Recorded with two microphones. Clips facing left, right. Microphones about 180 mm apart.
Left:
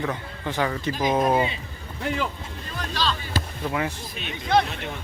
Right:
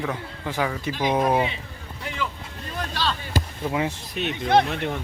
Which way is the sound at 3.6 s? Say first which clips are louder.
Right 1 dB; 20° right (ahead or behind).